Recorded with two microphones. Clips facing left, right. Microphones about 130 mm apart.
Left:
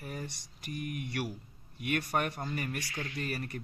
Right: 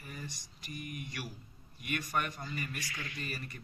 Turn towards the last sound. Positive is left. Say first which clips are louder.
# left 6 dB
turn(degrees=65)  # may be behind; listen again after turning